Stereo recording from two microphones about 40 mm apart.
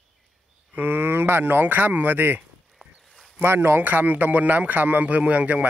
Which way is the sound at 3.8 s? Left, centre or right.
Right.